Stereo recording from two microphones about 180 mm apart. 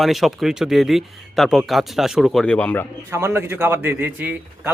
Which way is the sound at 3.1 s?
15° right (ahead or behind).